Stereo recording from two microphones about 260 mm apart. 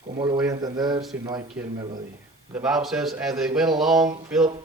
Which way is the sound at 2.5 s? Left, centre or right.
Centre.